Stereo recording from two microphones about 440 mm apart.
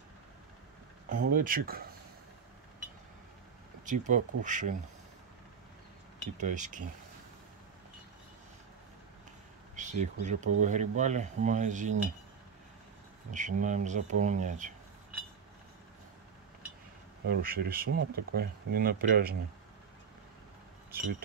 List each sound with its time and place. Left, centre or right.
1.0 s speech: centre
3.8 s speech: centre
6.3 s speech: centre
9.8 s speech: centre
13.3 s speech: centre
17.3 s speech: right